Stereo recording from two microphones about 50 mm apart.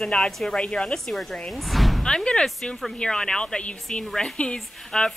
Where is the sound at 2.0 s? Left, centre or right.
Centre.